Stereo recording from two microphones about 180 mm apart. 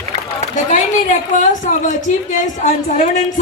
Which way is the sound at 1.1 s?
45° left (ahead or behind).